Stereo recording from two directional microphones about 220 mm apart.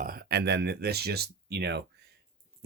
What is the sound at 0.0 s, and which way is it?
Speech, 45° right (ahead or behind).